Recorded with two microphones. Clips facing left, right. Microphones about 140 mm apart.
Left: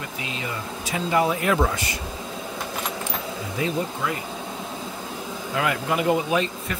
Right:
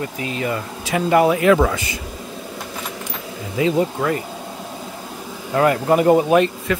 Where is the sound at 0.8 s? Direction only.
65° right (ahead or behind).